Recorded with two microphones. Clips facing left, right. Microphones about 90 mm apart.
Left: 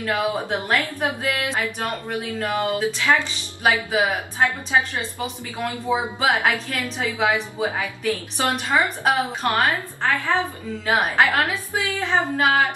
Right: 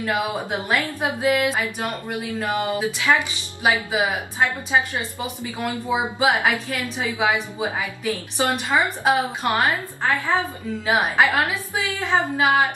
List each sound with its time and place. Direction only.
0.0 s speech: 15° right (ahead or behind)